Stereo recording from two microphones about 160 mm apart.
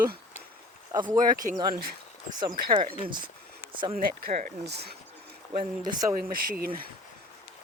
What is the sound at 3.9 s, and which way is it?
Speech, 50° right (ahead or behind).